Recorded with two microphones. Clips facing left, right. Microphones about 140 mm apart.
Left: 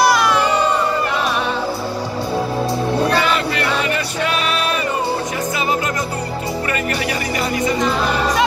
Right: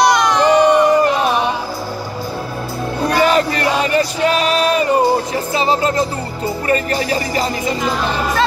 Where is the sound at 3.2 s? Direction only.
40° right (ahead or behind).